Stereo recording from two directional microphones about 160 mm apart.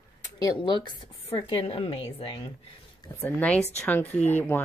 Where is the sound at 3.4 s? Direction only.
10° left (ahead or behind).